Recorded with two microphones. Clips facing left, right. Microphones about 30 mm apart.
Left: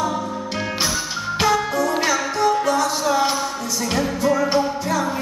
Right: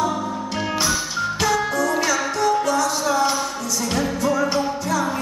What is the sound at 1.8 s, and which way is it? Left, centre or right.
Music, centre.